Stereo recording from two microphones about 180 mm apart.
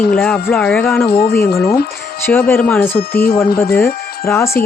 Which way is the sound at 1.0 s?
60° left (ahead or behind).